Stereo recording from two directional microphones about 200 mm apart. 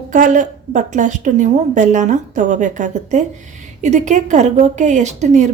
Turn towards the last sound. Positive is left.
turn(degrees=-35)  # may be behind; listen again after turning